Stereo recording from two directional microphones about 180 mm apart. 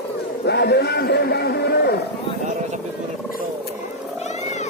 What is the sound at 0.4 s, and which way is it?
A man's voice, 65° left (ahead or behind).